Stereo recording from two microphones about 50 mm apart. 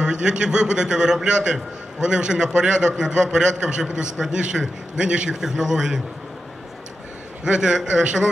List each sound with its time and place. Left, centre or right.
0.0 s a man's voice: centre
7.4 s a man's voice: centre